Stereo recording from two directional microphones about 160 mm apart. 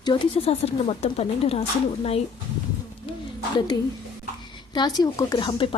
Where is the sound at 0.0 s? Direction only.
30° left (ahead or behind).